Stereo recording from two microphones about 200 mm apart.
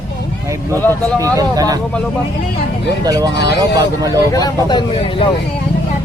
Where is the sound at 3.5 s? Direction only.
20° right (ahead or behind).